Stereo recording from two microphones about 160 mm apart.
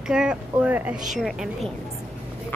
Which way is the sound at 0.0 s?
5° right (ahead or behind).